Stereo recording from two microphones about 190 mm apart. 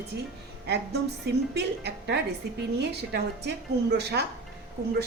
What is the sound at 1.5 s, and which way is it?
A woman's voice, 60° right (ahead or behind).